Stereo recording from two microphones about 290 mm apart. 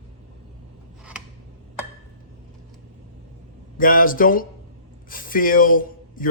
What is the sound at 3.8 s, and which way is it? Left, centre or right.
Speech, left.